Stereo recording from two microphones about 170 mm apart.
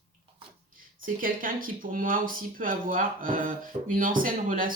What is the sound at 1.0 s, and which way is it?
Speech, 55° right (ahead or behind).